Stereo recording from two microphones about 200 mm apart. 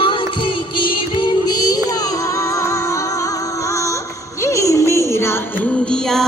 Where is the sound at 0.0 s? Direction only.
25° left (ahead or behind).